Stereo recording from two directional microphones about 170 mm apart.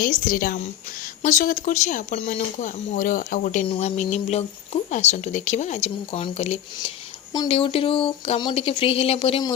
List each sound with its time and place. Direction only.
0.3 s speech: 55° left (ahead or behind)
3.7 s speech: 40° left (ahead or behind)